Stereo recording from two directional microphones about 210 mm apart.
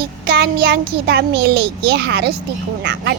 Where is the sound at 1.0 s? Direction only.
50° right (ahead or behind).